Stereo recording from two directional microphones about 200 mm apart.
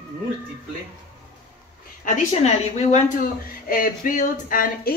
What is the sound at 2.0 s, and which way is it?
A woman's voice, 35° left (ahead or behind).